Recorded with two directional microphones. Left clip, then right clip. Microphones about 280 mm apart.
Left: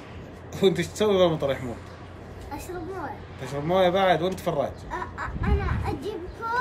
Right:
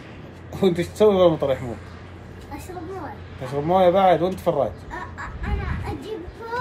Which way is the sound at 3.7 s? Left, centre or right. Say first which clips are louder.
Right 5 dB; centre.